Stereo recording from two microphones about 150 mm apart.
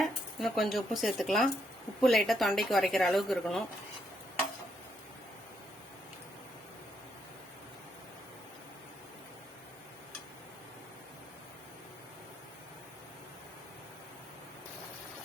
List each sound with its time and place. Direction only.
0.0 s a woman's voice: centre (ahead or behind)